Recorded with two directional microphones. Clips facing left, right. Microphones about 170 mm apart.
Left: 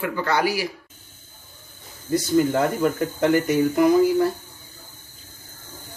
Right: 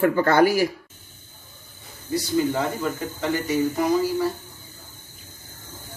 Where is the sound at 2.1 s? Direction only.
50° left (ahead or behind).